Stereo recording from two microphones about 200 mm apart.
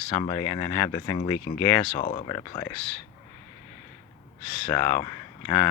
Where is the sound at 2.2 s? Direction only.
20° left (ahead or behind).